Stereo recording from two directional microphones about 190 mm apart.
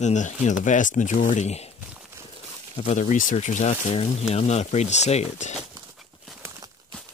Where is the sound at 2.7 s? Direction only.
35° left (ahead or behind).